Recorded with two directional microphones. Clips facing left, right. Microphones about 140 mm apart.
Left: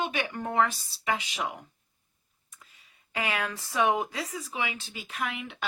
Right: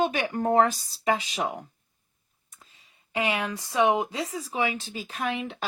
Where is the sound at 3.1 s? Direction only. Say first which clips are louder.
Right 4 dB; 25° right (ahead or behind).